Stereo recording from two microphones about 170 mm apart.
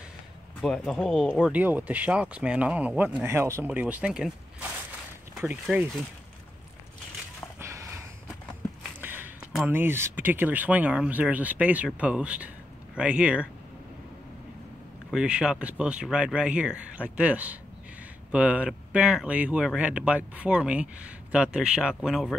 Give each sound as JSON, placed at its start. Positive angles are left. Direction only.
{"t": 0.6, "sound": "speech", "side_deg": 5}
{"t": 5.7, "sound": "speech", "side_deg": 0}
{"t": 7.6, "sound": "a sound", "side_deg": -15}
{"t": 9.0, "sound": "a sound", "side_deg": -10}
{"t": 9.7, "sound": "speech", "side_deg": -15}
{"t": 15.0, "sound": "speech", "side_deg": -5}